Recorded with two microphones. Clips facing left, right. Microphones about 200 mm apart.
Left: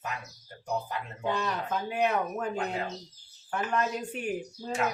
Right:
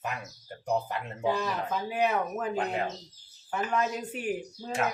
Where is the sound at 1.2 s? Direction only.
5° right (ahead or behind).